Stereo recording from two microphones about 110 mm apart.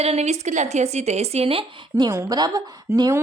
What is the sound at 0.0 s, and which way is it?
Speech, 75° right (ahead or behind).